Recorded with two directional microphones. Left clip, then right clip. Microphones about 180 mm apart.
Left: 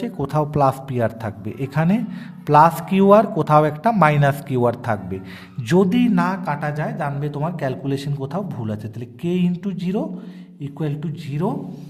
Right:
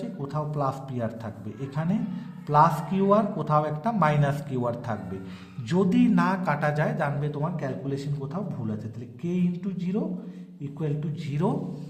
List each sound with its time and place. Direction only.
0.2 s a man's voice: 35° left (ahead or behind); by 7.1 s 10° left (ahead or behind)
7.2 s a man's voice: 30° left (ahead or behind)
11.3 s speech: 20° left (ahead or behind)